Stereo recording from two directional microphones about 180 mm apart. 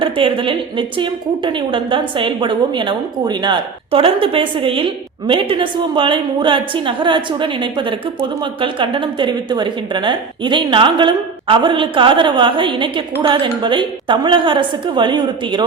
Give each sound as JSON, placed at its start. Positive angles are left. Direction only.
{"t": 0.0, "sound": "a woman's voice", "side_deg": -30}